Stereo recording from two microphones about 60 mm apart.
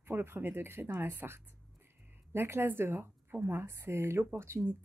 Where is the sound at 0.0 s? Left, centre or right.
Right.